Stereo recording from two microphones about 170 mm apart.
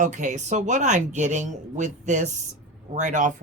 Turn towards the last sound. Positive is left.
turn(degrees=-45)  # may be behind; listen again after turning